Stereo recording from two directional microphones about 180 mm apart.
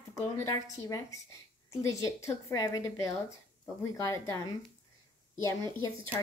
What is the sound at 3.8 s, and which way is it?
Speech, 15° left (ahead or behind).